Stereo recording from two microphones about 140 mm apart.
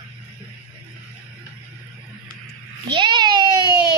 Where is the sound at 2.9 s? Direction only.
35° right (ahead or behind).